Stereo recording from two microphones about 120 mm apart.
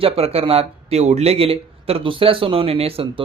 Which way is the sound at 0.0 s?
55° right (ahead or behind).